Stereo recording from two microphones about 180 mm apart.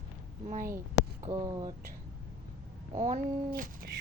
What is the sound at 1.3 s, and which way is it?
Speech, 20° right (ahead or behind).